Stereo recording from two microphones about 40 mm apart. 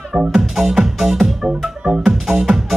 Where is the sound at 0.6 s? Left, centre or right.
Centre.